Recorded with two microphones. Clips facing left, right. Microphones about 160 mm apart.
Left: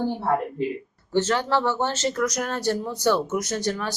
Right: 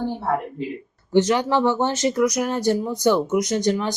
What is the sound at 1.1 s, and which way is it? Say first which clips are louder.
Speech: right 4 dB; 15° right (ahead or behind).